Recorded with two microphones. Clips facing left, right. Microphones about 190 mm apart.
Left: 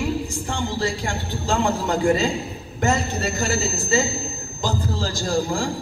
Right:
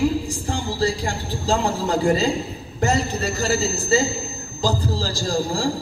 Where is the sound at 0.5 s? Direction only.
35° right (ahead or behind).